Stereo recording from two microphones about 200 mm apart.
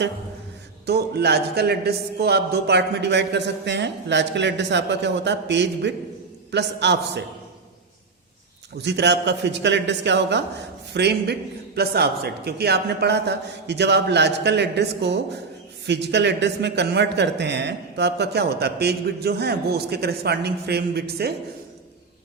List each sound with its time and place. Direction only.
0.9 s a man's voice: 55° right (ahead or behind)
8.8 s a man's voice: 60° right (ahead or behind)